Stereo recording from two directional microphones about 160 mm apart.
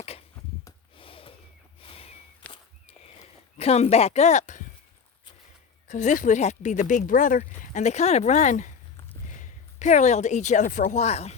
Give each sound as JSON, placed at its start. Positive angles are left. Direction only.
{"t": 0.9, "sound": "snort", "side_deg": 35}
{"t": 1.8, "sound": "a sound", "side_deg": 35}
{"t": 3.2, "sound": "speech", "side_deg": 40}
{"t": 5.9, "sound": "speech", "side_deg": 50}